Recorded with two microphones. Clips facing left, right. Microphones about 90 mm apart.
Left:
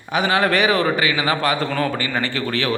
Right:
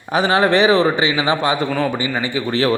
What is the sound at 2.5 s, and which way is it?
Speech, 30° right (ahead or behind).